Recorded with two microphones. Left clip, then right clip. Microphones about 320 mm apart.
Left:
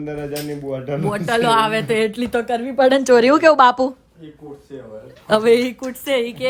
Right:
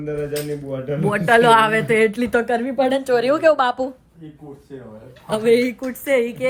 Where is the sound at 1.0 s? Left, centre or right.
Centre.